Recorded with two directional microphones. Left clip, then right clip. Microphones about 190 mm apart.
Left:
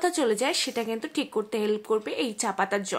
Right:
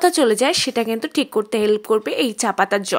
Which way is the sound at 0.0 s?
40° right (ahead or behind).